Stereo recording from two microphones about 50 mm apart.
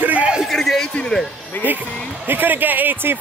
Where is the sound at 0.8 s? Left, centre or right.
Centre.